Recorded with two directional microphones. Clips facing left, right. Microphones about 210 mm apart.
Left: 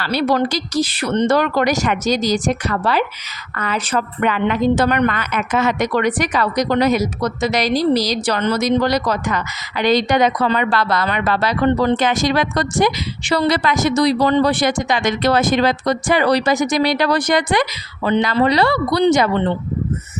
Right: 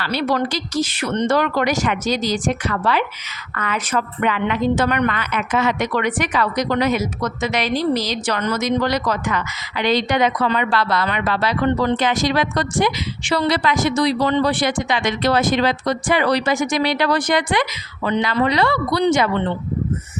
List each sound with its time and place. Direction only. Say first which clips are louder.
0.0 s a woman's voice: left 3 dB; 40° left (ahead or behind)